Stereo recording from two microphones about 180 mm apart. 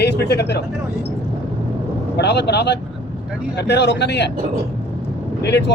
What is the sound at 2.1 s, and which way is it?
A man's voice, 70° left (ahead or behind).